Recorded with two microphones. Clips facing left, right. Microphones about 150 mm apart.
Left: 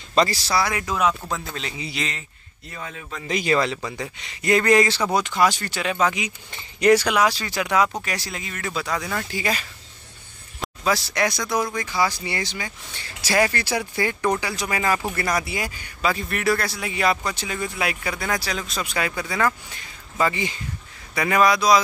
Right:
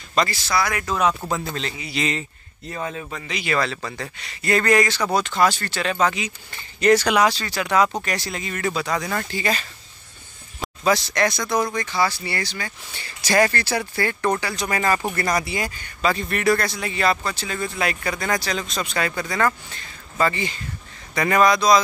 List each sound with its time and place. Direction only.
0.1 s speech: 30° left (ahead or behind)
0.8 s speech: 5° left (ahead or behind)
3.4 s speech: 20° left (ahead or behind)
5.1 s a man's voice: 10° left (ahead or behind)
12.9 s a man's voice: centre (ahead or behind)